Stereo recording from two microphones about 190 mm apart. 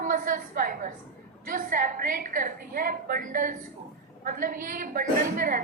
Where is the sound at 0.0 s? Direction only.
45° right (ahead or behind).